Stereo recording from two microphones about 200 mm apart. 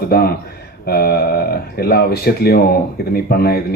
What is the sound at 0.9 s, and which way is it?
Speech, 50° left (ahead or behind).